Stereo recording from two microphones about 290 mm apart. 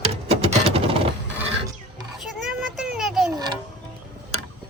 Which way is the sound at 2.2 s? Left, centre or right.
Centre.